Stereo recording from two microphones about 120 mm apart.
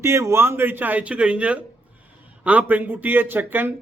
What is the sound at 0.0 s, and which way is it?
A man's voice, 25° right (ahead or behind).